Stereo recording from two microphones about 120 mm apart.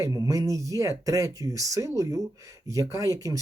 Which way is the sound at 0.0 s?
30° right (ahead or behind).